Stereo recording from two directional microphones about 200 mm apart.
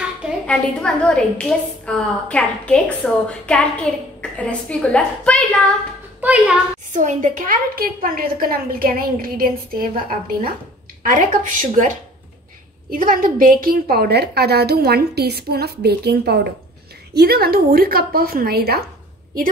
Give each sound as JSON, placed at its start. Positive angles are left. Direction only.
{"t": 0.2, "sound": "a woman's voice", "side_deg": 5}
{"t": 6.2, "sound": "a woman's voice", "side_deg": -5}
{"t": 6.9, "sound": "a woman's voice", "side_deg": -40}